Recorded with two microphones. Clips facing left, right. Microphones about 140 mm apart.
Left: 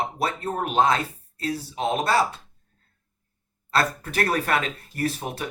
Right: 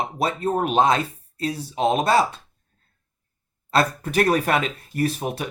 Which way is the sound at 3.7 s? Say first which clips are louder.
Right 3 dB; 15° right (ahead or behind).